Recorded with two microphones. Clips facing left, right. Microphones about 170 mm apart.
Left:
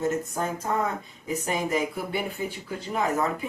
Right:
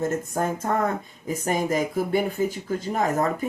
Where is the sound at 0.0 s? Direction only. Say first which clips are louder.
Right 2 dB; 50° right (ahead or behind).